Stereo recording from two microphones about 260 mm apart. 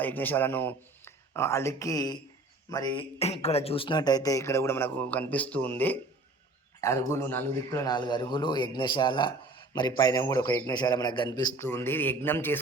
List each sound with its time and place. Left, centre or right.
0.0 s speech: centre